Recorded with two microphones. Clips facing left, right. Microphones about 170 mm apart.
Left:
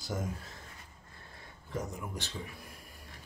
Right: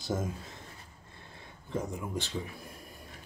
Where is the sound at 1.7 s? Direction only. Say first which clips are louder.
Right 4 dB; 25° right (ahead or behind).